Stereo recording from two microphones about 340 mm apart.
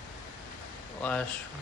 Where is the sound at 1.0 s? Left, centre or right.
Centre.